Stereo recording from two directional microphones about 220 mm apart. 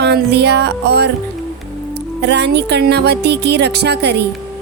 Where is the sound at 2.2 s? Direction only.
50° right (ahead or behind).